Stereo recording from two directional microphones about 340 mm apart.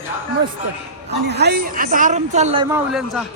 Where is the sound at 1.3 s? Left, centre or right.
Right.